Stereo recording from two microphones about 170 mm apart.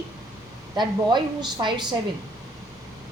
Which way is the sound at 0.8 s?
25° right (ahead or behind).